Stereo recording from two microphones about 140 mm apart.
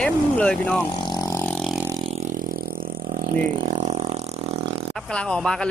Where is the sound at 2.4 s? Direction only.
85° right; by 4.8 s 45° right (ahead or behind).